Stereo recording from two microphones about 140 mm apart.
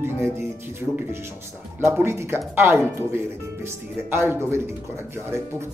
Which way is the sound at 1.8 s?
20° right (ahead or behind).